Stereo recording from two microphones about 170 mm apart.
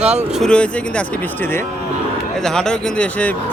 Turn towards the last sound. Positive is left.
turn(degrees=5)  # may be behind; listen again after turning